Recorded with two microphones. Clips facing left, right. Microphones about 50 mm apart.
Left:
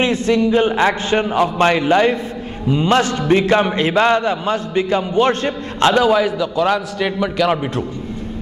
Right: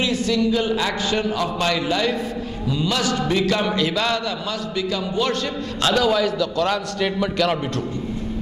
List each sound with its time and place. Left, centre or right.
0.0 s a man's voice: left
6.0 s a man's voice: centre